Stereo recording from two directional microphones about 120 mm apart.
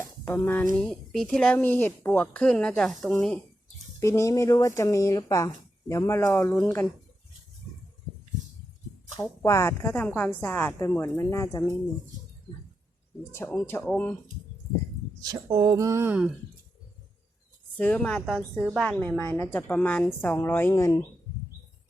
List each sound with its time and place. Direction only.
0.0 s a sound: 20° left (ahead or behind)
0.6 s speech: 5° left (ahead or behind)
4.0 s a woman's voice: 25° left (ahead or behind)
9.4 s a woman's voice: 25° left (ahead or behind)
13.3 s a woman's voice: 20° left (ahead or behind)
15.2 s speech: 35° right (ahead or behind)
17.7 s speech: 10° left (ahead or behind)